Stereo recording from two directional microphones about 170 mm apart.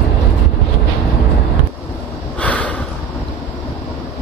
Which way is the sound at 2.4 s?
10° left (ahead or behind).